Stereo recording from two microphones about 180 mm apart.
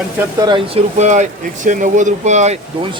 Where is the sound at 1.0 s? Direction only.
40° right (ahead or behind).